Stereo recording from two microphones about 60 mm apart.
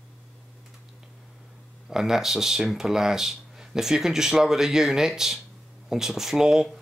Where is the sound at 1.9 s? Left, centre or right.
Centre.